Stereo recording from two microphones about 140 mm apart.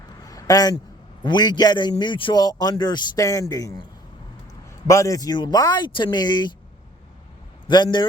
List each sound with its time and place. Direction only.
0.1 s a sound: 25° left (ahead or behind)
1.2 s a man's voice: 30° left (ahead or behind)
4.9 s speech: 20° left (ahead or behind)
7.7 s speech: 35° left (ahead or behind)